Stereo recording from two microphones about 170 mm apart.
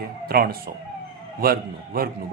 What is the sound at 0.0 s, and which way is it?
Speech, 65° right (ahead or behind).